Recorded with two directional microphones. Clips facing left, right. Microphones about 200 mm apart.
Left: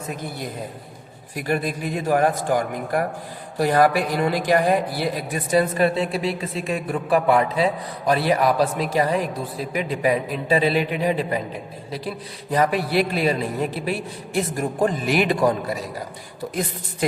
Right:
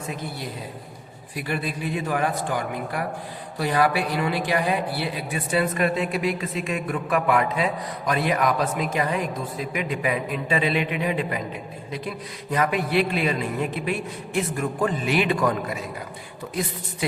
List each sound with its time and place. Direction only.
1.5 s a man's voice: 45° left (ahead or behind)